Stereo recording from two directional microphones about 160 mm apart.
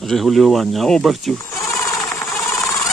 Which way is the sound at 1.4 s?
20° left (ahead or behind).